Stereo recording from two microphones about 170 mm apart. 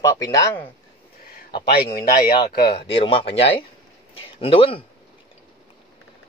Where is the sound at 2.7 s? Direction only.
30° left (ahead or behind).